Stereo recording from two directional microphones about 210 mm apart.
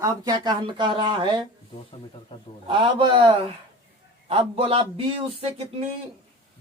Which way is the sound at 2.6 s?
25° right (ahead or behind).